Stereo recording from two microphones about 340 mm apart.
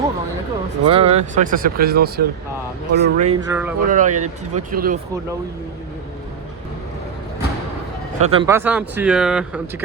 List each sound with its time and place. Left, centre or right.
0.9 s speech: centre
3.5 s speech: centre
3.8 s speech: right
8.2 s speech: centre